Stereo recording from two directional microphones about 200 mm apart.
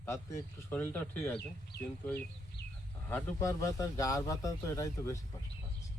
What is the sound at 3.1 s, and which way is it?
A man's voice, 10° left (ahead or behind).